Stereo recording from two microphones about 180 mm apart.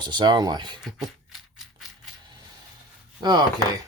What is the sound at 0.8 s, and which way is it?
Beatboxing, centre (ahead or behind).